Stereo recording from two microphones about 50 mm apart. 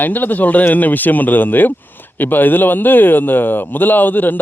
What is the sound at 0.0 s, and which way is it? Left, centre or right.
Speech, left.